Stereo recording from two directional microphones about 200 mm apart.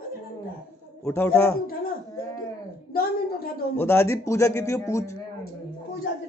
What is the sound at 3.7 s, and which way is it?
Speech, 10° left (ahead or behind).